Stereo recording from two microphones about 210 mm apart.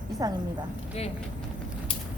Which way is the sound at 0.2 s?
20° right (ahead or behind).